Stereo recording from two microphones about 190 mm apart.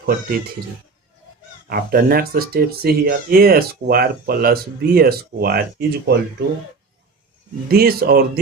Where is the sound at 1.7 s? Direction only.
50° right (ahead or behind).